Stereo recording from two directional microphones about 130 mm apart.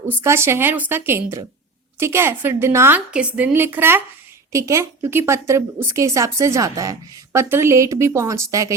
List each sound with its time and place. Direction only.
0.1 s a woman's voice: 20° right (ahead or behind)